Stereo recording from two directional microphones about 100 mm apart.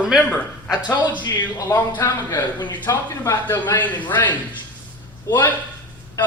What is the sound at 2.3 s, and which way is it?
Speech, 45° left (ahead or behind).